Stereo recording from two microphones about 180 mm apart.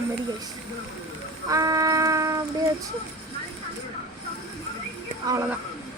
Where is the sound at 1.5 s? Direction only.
20° right (ahead or behind).